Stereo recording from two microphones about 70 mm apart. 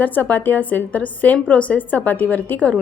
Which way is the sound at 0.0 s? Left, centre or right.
Left.